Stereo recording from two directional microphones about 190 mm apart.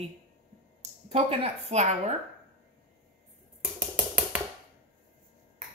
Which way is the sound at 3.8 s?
10° right (ahead or behind).